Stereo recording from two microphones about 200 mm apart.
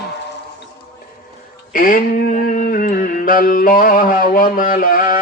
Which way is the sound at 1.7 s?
45° left (ahead or behind).